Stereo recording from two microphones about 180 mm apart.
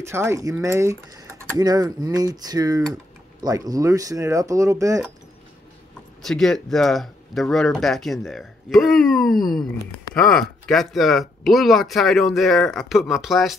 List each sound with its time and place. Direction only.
0.0 s speech: 15° right (ahead or behind)
6.2 s speech: centre (ahead or behind)